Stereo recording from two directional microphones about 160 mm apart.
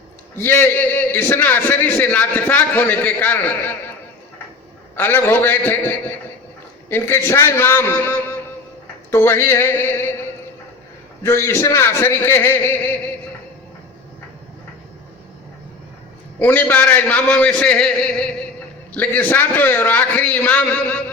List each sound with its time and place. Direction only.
0.3 s a man's voice: 15° left (ahead or behind)
4.9 s a man's voice: 15° left (ahead or behind)
11.2 s a man's voice: 15° left (ahead or behind)
16.4 s a man's voice: 10° left (ahead or behind)